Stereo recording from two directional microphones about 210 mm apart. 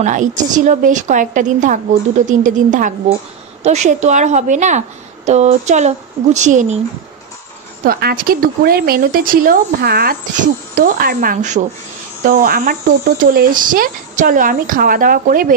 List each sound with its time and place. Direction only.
0.0 s a woman's voice: 35° right (ahead or behind)
7.8 s a woman's voice: 45° right (ahead or behind)